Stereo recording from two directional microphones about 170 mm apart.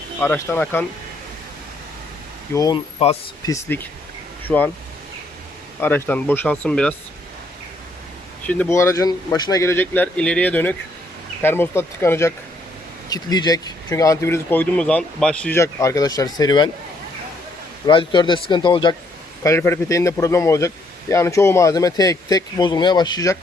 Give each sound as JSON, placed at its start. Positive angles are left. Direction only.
{"t": 0.2, "sound": "speech", "side_deg": 15}
{"t": 2.5, "sound": "a man's voice", "side_deg": 20}
{"t": 5.8, "sound": "speech", "side_deg": 10}
{"t": 8.4, "sound": "speech", "side_deg": 15}
{"t": 17.8, "sound": "a man's voice", "side_deg": 25}
{"t": 19.4, "sound": "a man's voice", "side_deg": 15}